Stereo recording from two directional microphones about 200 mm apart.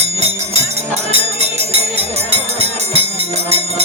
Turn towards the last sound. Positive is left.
turn(degrees=-30)  # may be behind; listen again after turning